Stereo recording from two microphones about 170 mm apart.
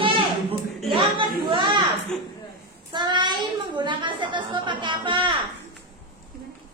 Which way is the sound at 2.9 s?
25° right (ahead or behind).